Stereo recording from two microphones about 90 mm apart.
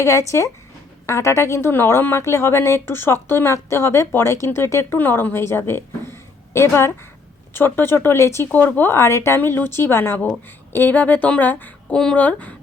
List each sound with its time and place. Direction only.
0.0 s a woman's voice: 35° left (ahead or behind)
8.5 s a woman's voice: 20° left (ahead or behind)